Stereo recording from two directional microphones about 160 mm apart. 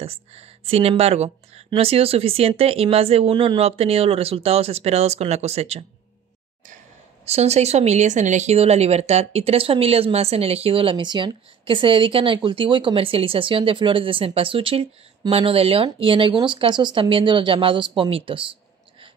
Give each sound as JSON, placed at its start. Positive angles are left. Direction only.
{"t": 0.0, "sound": "a sound", "side_deg": -40}
{"t": 1.7, "sound": "speech", "side_deg": -35}
{"t": 7.2, "sound": "speech", "side_deg": -40}